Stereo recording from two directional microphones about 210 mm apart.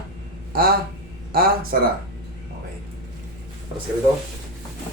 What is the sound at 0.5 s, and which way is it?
Speech, 45° right (ahead or behind).